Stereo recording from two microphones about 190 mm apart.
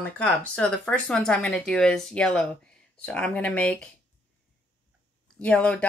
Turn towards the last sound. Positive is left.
turn(degrees=5)  # may be behind; listen again after turning